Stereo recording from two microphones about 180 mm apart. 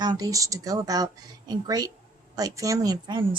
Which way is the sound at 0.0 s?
20° right (ahead or behind).